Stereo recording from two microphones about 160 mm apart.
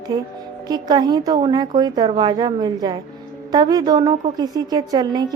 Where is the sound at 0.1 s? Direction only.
30° right (ahead or behind).